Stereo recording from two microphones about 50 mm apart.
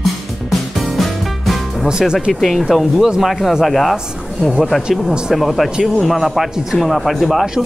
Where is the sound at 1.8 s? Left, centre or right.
Centre.